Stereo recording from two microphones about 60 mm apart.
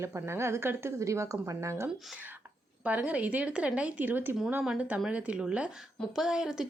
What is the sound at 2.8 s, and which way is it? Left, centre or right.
A woman's voice, right.